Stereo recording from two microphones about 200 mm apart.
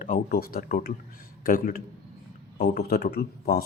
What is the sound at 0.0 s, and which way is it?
Speech, 45° left (ahead or behind).